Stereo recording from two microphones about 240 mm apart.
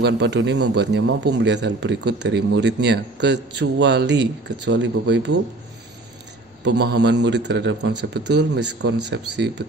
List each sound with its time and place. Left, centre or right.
0.0 s speech: right
6.6 s speech: right